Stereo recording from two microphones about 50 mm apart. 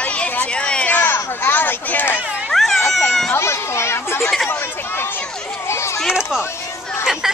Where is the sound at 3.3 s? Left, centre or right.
Left.